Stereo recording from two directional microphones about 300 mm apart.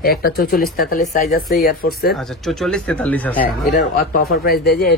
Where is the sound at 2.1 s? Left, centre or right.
Centre.